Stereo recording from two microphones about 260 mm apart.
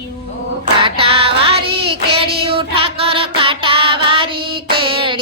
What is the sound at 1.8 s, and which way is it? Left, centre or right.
Child singing, right.